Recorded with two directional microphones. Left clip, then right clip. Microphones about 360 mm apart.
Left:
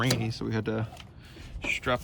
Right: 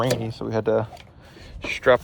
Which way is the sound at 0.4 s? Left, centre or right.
Centre.